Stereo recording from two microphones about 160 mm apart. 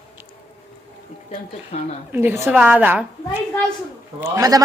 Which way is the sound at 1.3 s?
50° left (ahead or behind).